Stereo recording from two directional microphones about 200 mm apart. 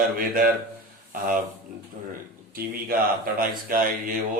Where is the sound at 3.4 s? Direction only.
45° right (ahead or behind).